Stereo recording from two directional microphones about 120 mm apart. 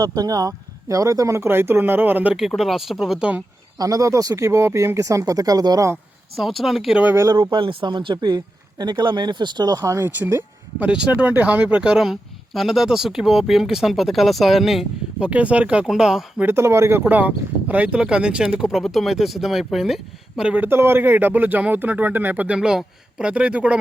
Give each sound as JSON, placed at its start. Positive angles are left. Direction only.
{"t": 0.0, "sound": "speech", "side_deg": -30}
{"t": 2.6, "sound": "speech", "side_deg": 0}
{"t": 3.8, "sound": "speech", "side_deg": -30}
{"t": 6.3, "sound": "speech", "side_deg": 0}
{"t": 7.0, "sound": "speech", "side_deg": -20}
{"t": 7.3, "sound": "speech", "side_deg": -45}
{"t": 10.8, "sound": "speech", "side_deg": -10}
{"t": 16.5, "sound": "speech", "side_deg": -20}